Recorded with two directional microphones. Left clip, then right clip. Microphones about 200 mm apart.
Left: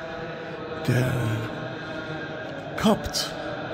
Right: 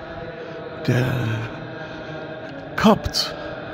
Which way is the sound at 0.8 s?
10° right (ahead or behind).